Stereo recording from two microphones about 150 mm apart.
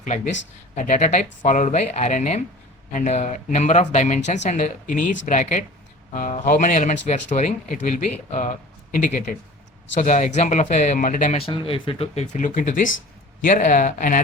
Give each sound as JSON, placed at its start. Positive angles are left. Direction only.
{"t": 0.8, "sound": "speech", "side_deg": 55}
{"t": 11.3, "sound": "speech", "side_deg": 35}